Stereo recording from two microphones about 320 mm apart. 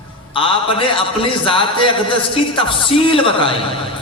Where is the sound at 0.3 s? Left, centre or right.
Centre.